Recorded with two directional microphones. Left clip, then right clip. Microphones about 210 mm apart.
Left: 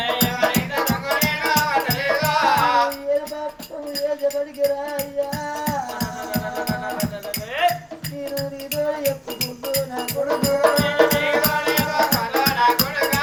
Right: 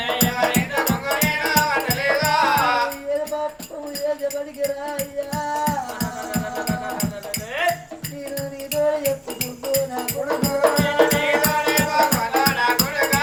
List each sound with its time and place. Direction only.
0.0 s music: centre (ahead or behind)
4.6 s music: centre (ahead or behind)
8.4 s music: centre (ahead or behind)